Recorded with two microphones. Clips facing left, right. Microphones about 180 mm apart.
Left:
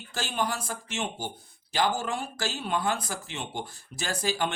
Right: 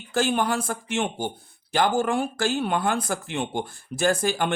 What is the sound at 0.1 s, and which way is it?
Speech, 55° right (ahead or behind).